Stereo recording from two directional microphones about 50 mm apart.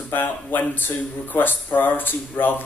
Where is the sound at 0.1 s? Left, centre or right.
Left.